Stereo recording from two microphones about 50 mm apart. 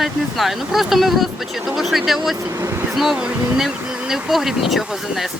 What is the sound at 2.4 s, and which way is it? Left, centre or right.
Speech, right.